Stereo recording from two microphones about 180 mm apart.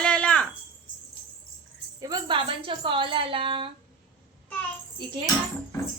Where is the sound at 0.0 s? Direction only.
5° left (ahead or behind).